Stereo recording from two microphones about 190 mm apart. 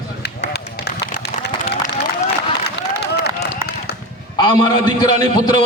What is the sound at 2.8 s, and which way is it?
Run, 65° left (ahead or behind).